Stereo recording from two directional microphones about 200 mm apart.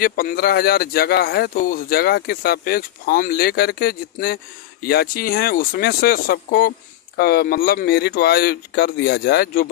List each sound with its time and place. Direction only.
0.0 s speech: 45° left (ahead or behind)